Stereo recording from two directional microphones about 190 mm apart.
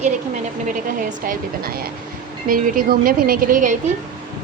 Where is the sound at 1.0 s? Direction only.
50° right (ahead or behind).